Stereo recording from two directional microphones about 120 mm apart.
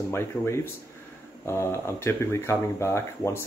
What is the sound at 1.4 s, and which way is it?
Speech, 20° left (ahead or behind).